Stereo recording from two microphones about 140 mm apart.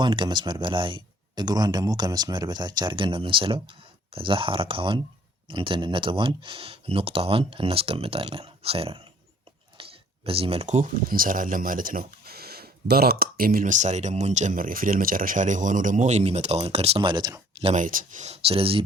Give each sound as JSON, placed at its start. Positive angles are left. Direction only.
{"t": 0.0, "sound": "speech", "side_deg": -35}
{"t": 9.8, "sound": "a sound", "side_deg": -40}
{"t": 10.2, "sound": "speech", "side_deg": -40}
{"t": 11.1, "sound": "speech", "side_deg": -80}
{"t": 17.7, "sound": "speech", "side_deg": -70}